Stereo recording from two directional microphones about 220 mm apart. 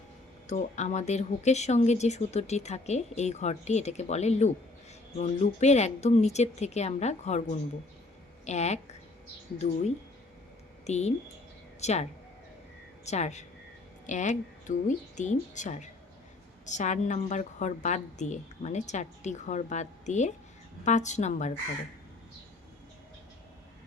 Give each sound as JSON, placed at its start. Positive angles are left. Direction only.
{"t": 0.4, "sound": "speech", "side_deg": 30}
{"t": 13.1, "sound": "speech", "side_deg": 30}